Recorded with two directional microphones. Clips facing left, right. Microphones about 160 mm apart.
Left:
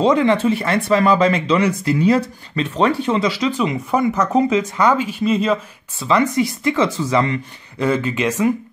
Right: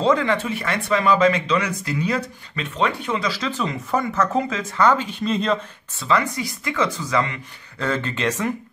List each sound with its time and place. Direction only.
0.0 s speech: 20° left (ahead or behind)
6.0 s speech: 20° left (ahead or behind)
7.8 s speech: 10° left (ahead or behind)